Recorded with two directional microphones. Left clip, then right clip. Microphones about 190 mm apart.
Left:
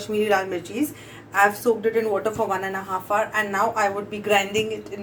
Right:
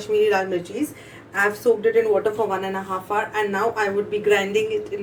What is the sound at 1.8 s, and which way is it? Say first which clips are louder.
A woman's voice: right 4 dB; 35° left (ahead or behind).